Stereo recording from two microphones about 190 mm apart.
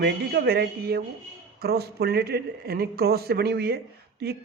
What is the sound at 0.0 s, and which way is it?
Speech, 55° right (ahead or behind).